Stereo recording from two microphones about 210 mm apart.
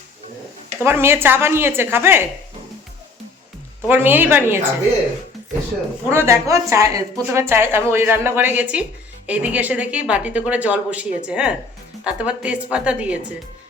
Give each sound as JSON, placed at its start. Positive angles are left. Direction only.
{"t": 0.9, "sound": "a woman's voice", "side_deg": -10}
{"t": 3.8, "sound": "a woman's voice", "side_deg": -10}
{"t": 6.1, "sound": "a woman's voice", "side_deg": -10}